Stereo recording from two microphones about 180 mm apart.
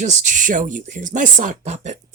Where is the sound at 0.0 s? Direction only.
45° right (ahead or behind).